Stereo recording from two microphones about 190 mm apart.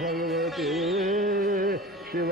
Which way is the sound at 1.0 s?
45° right (ahead or behind).